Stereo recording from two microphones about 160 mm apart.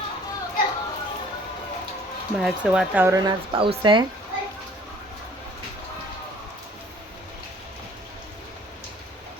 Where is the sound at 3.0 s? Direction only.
25° right (ahead or behind).